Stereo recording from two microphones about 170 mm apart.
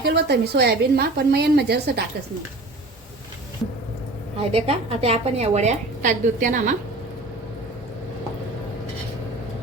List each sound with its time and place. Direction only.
0.0 s a woman's voice: 75° right (ahead or behind)
4.4 s a woman's voice: 35° right (ahead or behind)